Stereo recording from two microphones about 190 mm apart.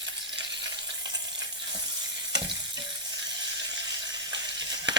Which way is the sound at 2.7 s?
70° right (ahead or behind).